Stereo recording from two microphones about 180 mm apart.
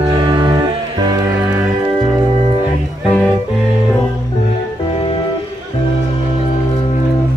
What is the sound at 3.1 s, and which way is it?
Music, 5° left (ahead or behind).